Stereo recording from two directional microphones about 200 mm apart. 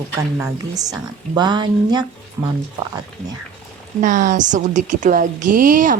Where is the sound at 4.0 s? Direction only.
40° right (ahead or behind).